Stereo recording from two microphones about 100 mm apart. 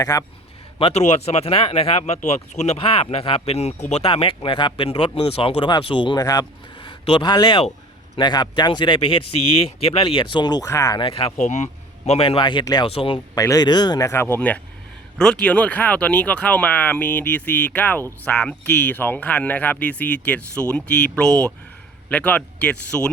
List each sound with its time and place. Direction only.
0.0 s speech: 35° left (ahead or behind)
0.8 s speech: 75° left (ahead or behind)
4.2 s speech: 60° left (ahead or behind)
4.9 s speech: 70° left (ahead or behind)
5.8 s speech: 55° left (ahead or behind); by 11.0 s 35° left (ahead or behind)
11.0 s speech: 65° left (ahead or behind)
12.0 s a man's voice: 85° left
12.4 s speech: 50° left (ahead or behind)
12.8 s speech: 65° left (ahead or behind)
13.1 s speech: 40° left (ahead or behind)
14.1 s speech: 20° left (ahead or behind)